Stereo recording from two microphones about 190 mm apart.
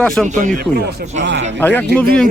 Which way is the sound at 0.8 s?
55° right (ahead or behind).